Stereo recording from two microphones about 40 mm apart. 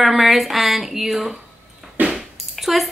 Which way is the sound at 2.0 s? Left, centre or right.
Right.